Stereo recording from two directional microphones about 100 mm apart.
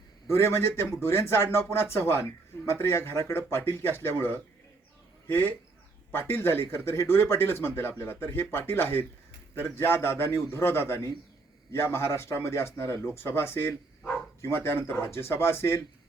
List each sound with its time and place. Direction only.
0.3 s speech: 25° left (ahead or behind)
5.3 s speech: 20° left (ahead or behind)